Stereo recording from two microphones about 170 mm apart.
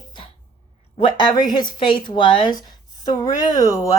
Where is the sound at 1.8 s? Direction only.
30° left (ahead or behind).